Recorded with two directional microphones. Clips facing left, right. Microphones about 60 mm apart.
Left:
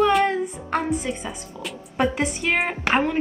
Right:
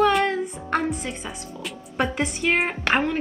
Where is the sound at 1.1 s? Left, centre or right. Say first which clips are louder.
Left 3 dB; centre.